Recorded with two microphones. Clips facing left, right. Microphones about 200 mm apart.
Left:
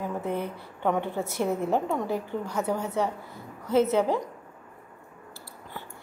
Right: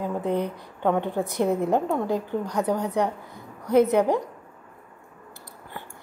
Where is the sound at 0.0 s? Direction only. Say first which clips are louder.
Right 4 dB; 15° right (ahead or behind).